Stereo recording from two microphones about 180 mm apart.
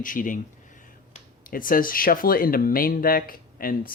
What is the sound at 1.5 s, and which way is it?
Speech, 50° left (ahead or behind).